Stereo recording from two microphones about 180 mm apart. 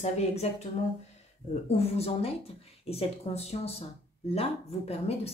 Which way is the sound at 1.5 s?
35° left (ahead or behind).